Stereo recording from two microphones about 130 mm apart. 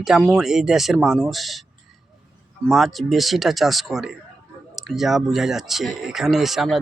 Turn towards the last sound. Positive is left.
turn(degrees=0)  # may be behind; listen again after turning